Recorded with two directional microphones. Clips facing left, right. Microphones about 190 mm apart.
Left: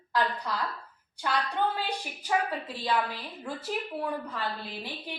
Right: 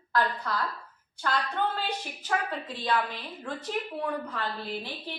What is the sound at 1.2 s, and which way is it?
A woman's voice, 15° left (ahead or behind).